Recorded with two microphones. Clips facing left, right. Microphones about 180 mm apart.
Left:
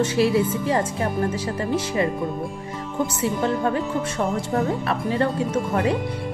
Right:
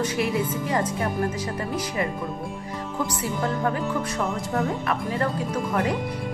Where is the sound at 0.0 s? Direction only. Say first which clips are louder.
Left 5 dB; 30° left (ahead or behind).